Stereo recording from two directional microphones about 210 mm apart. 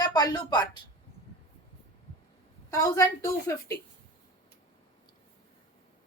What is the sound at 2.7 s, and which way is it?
Speech, 15° left (ahead or behind).